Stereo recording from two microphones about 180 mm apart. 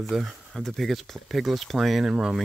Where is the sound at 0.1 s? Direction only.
Centre (ahead or behind).